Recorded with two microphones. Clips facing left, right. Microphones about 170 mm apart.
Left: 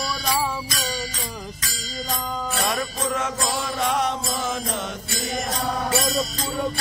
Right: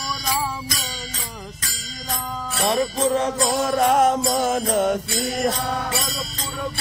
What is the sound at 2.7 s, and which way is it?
Music, 30° right (ahead or behind).